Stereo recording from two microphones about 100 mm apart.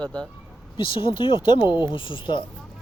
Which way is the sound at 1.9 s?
55° left (ahead or behind).